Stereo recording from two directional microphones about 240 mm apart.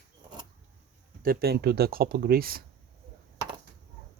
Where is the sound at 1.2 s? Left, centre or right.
Right.